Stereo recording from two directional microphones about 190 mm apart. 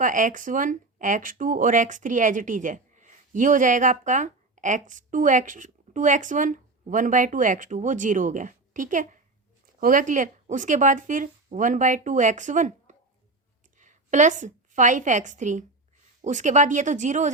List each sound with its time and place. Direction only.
0.0 s a woman's voice: 45° right (ahead or behind)